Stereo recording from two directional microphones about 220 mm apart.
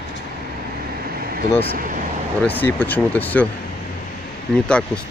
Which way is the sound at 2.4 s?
10° left (ahead or behind).